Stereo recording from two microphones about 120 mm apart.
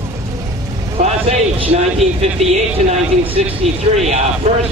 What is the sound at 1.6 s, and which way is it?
Speech, 55° right (ahead or behind).